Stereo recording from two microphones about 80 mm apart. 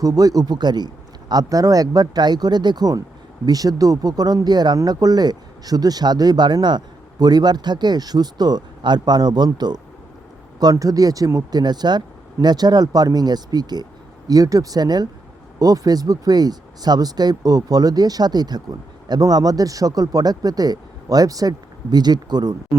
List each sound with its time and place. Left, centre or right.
0.0 s speech: right
1.3 s speech: right
10.6 s speech: right
11.6 s speech: right